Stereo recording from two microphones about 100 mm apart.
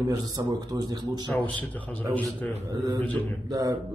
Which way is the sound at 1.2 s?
15° left (ahead or behind).